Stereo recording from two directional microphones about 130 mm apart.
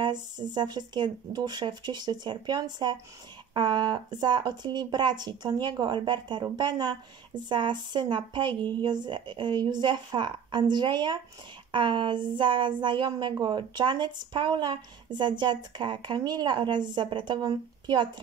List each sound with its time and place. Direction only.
0.0 s speech: 35° right (ahead or behind)